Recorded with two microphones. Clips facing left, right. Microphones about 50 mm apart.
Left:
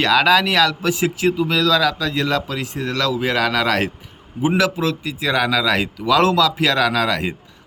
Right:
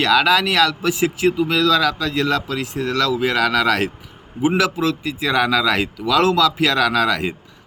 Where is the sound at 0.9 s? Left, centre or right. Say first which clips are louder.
Right 1 dB; centre.